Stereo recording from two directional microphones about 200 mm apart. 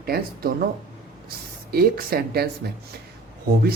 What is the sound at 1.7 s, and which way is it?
Speech, 50° right (ahead or behind).